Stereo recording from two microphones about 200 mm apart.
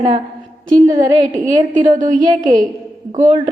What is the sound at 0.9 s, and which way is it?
Speech, 20° right (ahead or behind).